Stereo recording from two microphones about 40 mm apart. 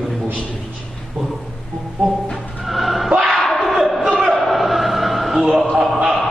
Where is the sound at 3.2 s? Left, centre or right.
Centre.